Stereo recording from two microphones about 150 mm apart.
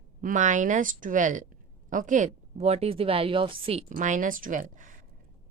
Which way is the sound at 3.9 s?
55° right (ahead or behind).